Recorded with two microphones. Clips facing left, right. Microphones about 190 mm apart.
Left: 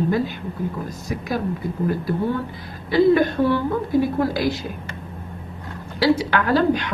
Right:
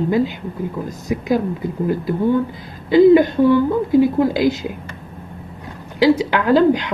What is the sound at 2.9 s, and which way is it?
Speech, 15° right (ahead or behind).